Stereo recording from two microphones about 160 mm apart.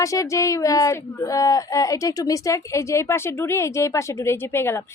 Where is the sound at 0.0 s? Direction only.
20° left (ahead or behind).